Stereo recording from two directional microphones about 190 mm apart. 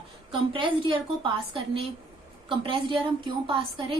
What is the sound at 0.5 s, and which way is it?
A woman's voice, 25° right (ahead or behind).